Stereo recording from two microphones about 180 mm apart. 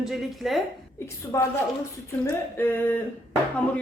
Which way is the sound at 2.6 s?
10° left (ahead or behind).